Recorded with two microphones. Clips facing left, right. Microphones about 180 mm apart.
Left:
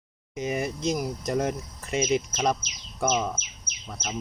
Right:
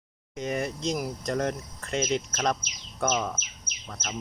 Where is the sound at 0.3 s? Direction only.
5° left (ahead or behind).